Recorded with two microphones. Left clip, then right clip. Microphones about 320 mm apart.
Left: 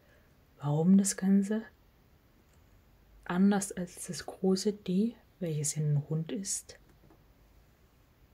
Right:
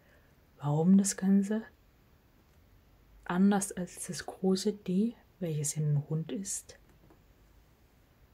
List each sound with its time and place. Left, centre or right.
0.6 s speech: centre
3.3 s speech: centre